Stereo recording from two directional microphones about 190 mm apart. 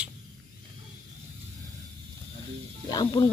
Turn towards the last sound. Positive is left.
turn(degrees=25)  # may be behind; listen again after turning